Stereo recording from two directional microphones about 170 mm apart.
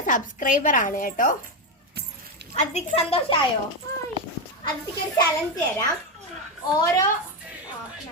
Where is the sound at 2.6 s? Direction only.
40° left (ahead or behind).